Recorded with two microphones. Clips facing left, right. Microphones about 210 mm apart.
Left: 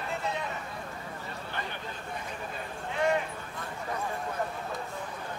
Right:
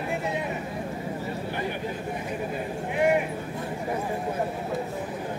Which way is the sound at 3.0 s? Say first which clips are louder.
Right 5 dB; 15° right (ahead or behind).